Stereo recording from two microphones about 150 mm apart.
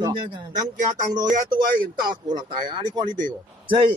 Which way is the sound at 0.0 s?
30° right (ahead or behind).